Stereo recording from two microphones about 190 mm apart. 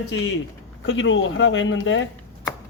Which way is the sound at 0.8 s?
80° left.